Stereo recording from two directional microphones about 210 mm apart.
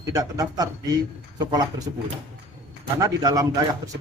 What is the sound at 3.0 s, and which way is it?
Speech, 15° right (ahead or behind).